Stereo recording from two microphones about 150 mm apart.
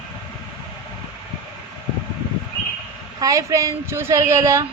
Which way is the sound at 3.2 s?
20° right (ahead or behind).